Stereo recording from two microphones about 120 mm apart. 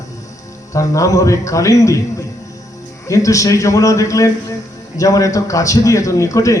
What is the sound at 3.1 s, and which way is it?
A man's voice, 25° left (ahead or behind).